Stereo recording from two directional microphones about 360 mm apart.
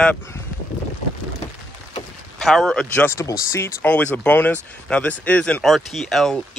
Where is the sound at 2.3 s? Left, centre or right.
Centre.